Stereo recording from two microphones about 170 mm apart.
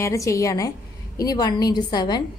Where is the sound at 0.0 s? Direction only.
20° left (ahead or behind).